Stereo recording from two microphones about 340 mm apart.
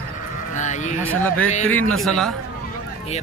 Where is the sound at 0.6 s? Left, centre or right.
Left.